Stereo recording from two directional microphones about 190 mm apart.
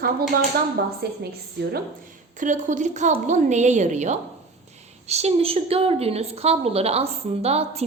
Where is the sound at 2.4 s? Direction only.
40° right (ahead or behind).